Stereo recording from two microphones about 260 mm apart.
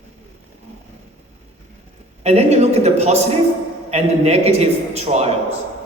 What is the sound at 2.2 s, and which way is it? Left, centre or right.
A woman's voice, right.